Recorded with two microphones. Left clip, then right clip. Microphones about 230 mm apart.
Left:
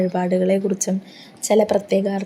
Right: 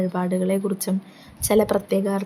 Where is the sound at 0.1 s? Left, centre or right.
Centre.